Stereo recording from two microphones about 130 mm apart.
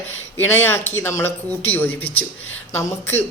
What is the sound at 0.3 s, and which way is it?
Speech, 15° left (ahead or behind).